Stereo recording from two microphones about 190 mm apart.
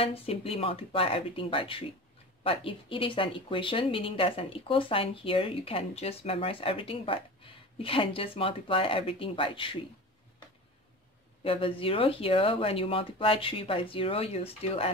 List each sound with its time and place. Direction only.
0.0 s speech: 30° left (ahead or behind)
11.4 s speech: 30° left (ahead or behind)